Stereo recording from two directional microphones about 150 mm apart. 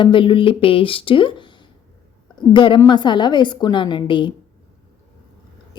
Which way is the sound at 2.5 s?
30° left (ahead or behind).